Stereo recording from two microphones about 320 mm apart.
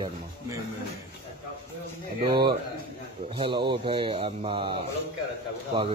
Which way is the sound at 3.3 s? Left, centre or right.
Centre.